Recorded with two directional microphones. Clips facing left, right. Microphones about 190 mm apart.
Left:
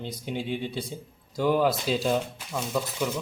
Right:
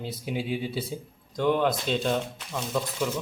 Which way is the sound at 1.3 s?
5° left (ahead or behind).